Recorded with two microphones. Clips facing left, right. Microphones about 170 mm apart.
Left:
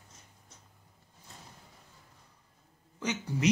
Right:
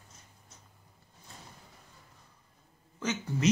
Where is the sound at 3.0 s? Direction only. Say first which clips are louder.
Even; 15° left (ahead or behind).